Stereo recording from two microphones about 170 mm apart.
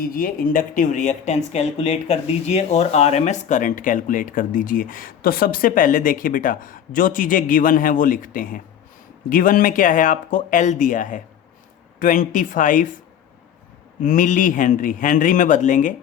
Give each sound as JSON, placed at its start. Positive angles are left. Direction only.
{"t": 0.0, "sound": "speech", "side_deg": 55}
{"t": 14.0, "sound": "speech", "side_deg": 50}